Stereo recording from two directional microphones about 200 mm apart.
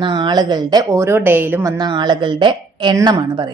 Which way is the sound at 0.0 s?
20° right (ahead or behind).